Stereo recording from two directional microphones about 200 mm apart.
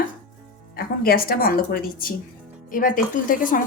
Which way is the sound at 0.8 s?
50° left (ahead or behind).